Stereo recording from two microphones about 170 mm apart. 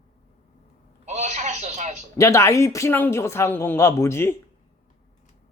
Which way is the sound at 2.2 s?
15° left (ahead or behind).